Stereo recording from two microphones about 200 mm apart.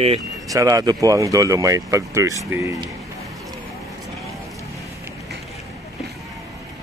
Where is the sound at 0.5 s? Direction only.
15° right (ahead or behind).